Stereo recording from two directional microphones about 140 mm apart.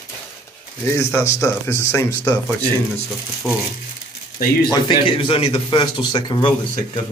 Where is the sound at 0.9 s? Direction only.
20° left (ahead or behind).